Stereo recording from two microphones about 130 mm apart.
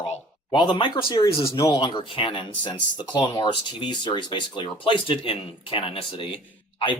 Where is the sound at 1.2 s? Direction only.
25° left (ahead or behind); by 6.9 s 40° left (ahead or behind).